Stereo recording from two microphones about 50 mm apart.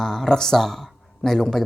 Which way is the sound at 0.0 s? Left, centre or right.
Centre.